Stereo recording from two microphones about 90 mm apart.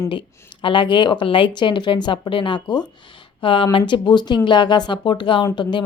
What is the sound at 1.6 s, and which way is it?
Speech, 60° left (ahead or behind).